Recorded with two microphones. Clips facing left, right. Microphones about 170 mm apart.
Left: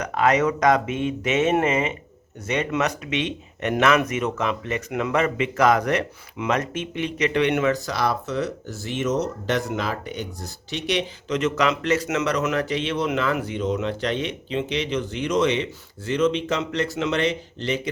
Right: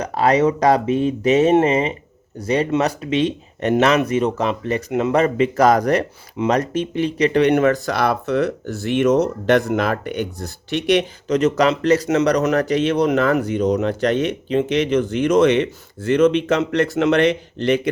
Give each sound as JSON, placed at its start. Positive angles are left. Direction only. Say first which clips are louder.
{"t": 0.0, "sound": "speech", "louder": "right 4 dB", "side_deg": -35}